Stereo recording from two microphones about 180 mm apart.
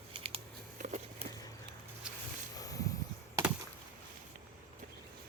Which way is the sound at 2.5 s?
20° left (ahead or behind).